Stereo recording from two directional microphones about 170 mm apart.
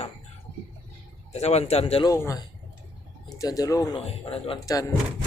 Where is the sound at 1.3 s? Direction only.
40° left (ahead or behind).